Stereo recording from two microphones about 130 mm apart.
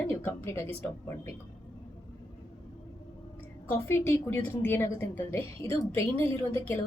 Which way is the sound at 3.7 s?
20° left (ahead or behind).